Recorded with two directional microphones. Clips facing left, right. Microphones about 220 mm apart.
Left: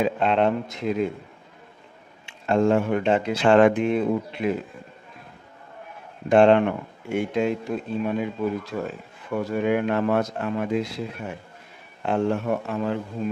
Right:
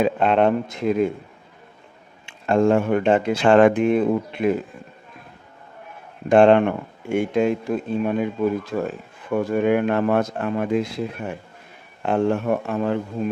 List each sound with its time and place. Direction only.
0.0 s speech: 50° right (ahead or behind)
2.2 s speech: 50° right (ahead or behind)
6.2 s speech: 50° right (ahead or behind)